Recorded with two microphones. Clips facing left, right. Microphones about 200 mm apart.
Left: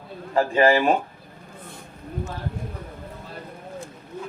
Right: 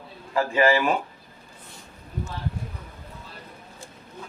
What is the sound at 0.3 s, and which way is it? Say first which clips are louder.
Speech: left 3 dB; 35° left (ahead or behind).